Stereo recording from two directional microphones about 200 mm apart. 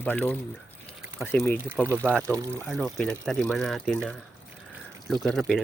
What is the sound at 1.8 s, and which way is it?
Speech, 10° right (ahead or behind).